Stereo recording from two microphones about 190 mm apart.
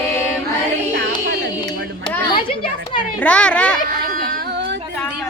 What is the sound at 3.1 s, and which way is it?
Speech, 5° left (ahead or behind).